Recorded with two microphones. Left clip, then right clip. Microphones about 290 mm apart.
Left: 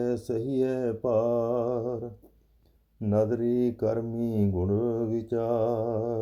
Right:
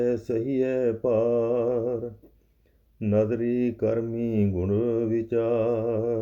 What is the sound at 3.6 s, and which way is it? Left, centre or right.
Speech, left.